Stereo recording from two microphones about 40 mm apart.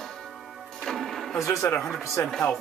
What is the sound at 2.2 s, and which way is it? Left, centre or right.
Speech, left.